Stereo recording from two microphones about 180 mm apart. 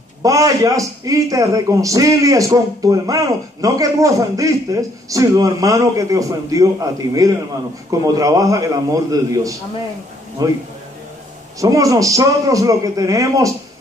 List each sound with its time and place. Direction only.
0.2 s a man's voice: 20° right (ahead or behind)
11.6 s a man's voice: 20° right (ahead or behind)